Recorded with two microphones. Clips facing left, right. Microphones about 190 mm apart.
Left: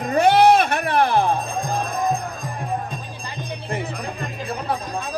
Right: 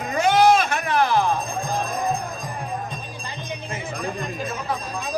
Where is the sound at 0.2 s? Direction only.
60° left (ahead or behind).